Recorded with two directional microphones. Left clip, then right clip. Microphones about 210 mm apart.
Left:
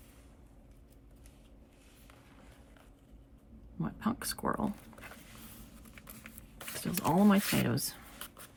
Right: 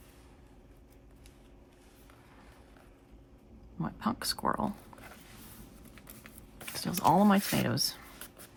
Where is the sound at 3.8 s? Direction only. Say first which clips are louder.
Right 2 dB; 10° right (ahead or behind).